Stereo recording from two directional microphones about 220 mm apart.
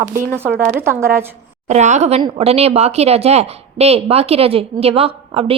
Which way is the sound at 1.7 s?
30° right (ahead or behind).